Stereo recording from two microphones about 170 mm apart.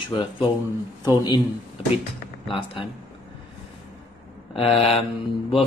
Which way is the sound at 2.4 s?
30° left (ahead or behind).